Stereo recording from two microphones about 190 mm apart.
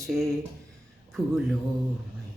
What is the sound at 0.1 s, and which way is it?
Mantra, centre (ahead or behind).